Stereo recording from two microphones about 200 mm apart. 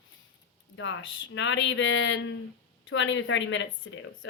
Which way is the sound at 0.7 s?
70° left (ahead or behind).